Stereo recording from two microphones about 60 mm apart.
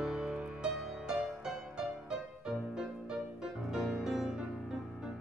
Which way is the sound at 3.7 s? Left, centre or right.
Centre.